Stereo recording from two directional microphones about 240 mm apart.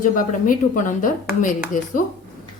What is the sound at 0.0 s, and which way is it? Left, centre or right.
A woman's voice, left.